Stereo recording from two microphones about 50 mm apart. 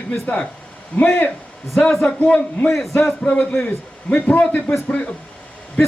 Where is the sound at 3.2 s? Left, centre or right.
Left.